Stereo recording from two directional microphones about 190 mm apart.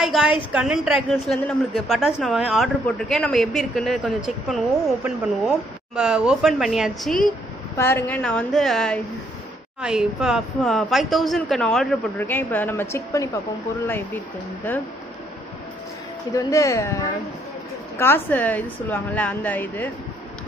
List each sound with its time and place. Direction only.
0.0 s a woman's voice: centre (ahead or behind)
7.7 s a woman's voice: 15° left (ahead or behind)
16.3 s a woman's voice: 15° left (ahead or behind)